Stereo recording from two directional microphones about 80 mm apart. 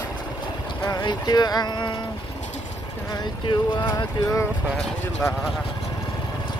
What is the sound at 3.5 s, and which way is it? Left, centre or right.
Speech, left.